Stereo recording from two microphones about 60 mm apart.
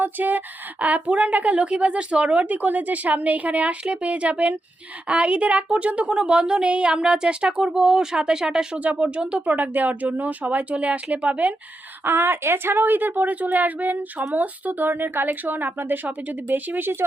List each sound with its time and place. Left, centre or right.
0.0 s a woman's voice: right; by 8.8 s centre
8.8 s speech: right
12.0 s speech: right